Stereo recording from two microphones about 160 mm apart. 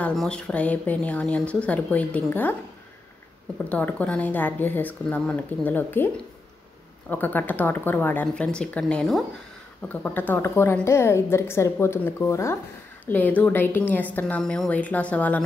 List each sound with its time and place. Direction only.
0.0 s a woman's voice: 5° left (ahead or behind)
3.6 s a woman's voice: 10° left (ahead or behind)
7.1 s a woman's voice: 10° left (ahead or behind)